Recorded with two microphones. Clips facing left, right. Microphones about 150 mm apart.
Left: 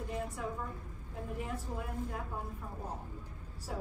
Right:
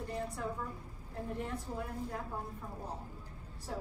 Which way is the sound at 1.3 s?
5° left (ahead or behind).